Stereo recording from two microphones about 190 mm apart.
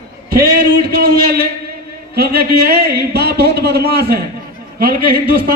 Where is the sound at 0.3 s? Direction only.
50° right (ahead or behind).